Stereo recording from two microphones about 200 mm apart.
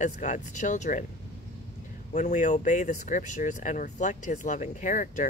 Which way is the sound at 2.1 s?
35° left (ahead or behind).